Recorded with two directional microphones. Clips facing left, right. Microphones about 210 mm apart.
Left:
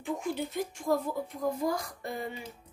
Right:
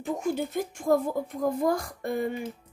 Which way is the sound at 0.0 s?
45° right (ahead or behind).